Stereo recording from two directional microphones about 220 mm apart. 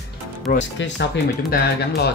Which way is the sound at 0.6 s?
55° left (ahead or behind).